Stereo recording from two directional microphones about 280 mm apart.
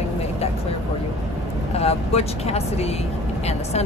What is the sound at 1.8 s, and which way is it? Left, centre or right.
Speech, left.